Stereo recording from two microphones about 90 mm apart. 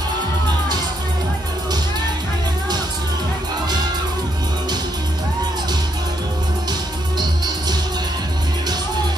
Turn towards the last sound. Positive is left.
turn(degrees=-50)  # may be behind; listen again after turning